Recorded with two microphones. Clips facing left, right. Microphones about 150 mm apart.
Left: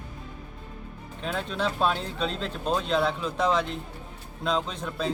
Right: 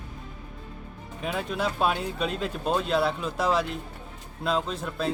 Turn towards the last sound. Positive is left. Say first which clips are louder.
# right 1 dB
turn(degrees=-5)  # may be behind; listen again after turning